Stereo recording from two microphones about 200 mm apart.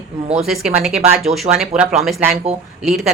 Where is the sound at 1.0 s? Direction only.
30° right (ahead or behind).